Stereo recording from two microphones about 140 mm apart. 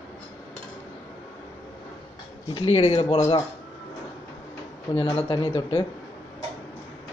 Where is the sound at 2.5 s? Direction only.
40° left (ahead or behind).